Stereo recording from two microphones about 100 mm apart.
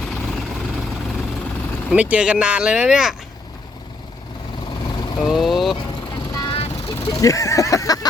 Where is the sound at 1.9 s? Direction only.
15° right (ahead or behind).